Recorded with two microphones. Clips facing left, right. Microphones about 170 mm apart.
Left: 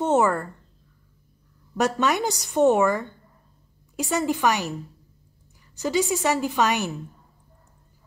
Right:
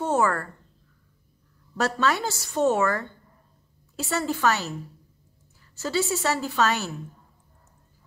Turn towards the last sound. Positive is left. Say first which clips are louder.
# left 2 dB
turn(degrees=15)  # may be behind; listen again after turning